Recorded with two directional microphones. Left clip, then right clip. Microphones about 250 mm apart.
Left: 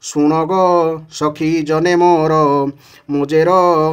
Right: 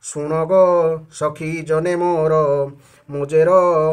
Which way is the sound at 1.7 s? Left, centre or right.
Left.